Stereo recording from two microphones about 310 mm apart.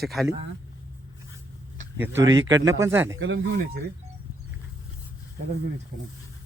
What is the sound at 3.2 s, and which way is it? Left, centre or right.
Speech, right.